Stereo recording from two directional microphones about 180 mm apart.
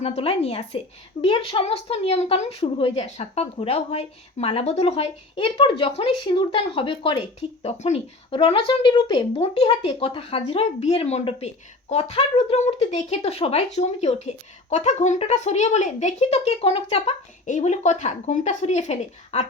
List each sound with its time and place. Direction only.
0.0 s a woman's voice: 35° left (ahead or behind)